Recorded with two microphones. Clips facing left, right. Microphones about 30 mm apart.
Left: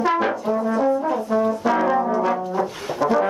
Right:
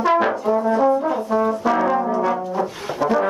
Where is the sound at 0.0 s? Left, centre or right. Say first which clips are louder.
Right 3 dB; centre.